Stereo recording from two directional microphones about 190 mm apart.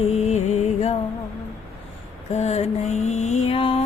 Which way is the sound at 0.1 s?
35° left (ahead or behind).